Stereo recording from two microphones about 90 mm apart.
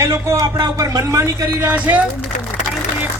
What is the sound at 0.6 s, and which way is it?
Speech, 40° right (ahead or behind).